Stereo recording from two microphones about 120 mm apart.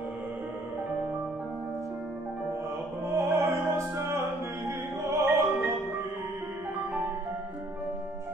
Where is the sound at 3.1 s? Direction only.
20° right (ahead or behind).